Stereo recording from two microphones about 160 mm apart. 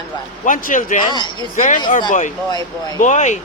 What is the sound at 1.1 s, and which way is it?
Speech, 30° left (ahead or behind).